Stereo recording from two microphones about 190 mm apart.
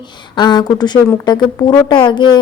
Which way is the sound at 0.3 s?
25° left (ahead or behind).